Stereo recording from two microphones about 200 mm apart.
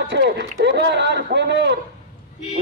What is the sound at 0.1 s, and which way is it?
A man's voice, 60° right (ahead or behind).